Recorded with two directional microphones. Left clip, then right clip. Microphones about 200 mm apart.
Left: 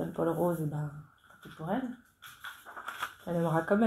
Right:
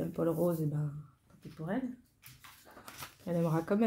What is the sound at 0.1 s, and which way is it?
Speech, 50° right (ahead or behind).